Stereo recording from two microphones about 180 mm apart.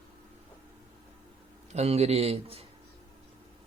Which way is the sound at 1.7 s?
35° right (ahead or behind).